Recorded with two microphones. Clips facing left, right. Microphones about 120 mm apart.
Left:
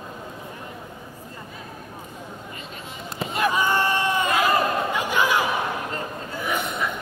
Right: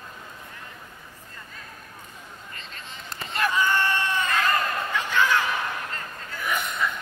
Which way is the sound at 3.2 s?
5° left (ahead or behind).